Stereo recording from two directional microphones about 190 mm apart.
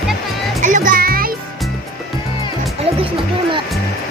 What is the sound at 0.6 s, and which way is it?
Music, 40° right (ahead or behind).